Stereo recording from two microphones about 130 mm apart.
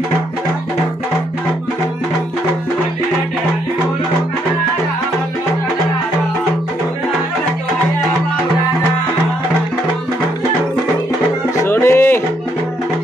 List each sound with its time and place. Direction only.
11.6 s music: 20° left (ahead or behind)